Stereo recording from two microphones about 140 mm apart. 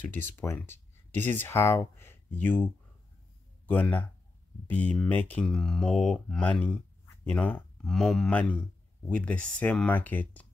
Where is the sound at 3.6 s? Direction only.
10° left (ahead or behind).